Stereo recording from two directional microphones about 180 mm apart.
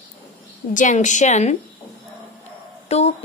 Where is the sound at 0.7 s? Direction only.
45° left (ahead or behind).